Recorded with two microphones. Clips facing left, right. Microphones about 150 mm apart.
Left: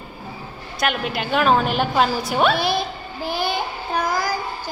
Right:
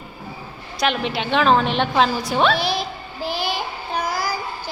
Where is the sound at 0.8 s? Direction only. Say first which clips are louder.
Right 1 dB; 5° left (ahead or behind).